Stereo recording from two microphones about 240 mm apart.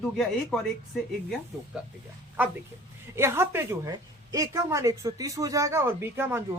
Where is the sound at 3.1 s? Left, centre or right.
Centre.